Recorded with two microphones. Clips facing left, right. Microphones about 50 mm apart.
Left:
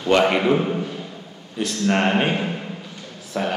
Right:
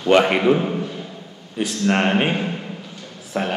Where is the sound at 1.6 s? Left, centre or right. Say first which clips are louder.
Right 1 dB; centre.